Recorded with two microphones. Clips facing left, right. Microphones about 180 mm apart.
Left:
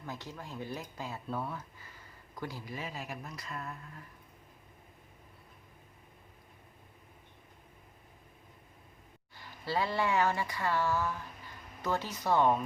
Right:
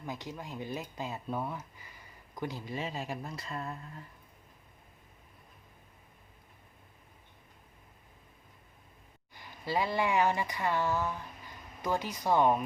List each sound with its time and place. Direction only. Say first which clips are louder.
0.0 s speech: right 3 dB; 15° right (ahead or behind)
9.3 s speech: right 1 dB; 15° right (ahead or behind)